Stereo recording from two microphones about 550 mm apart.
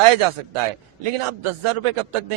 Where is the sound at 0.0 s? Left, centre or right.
Right.